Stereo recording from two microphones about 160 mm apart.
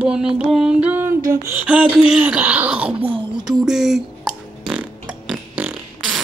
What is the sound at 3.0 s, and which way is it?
Speech, 35° right (ahead or behind).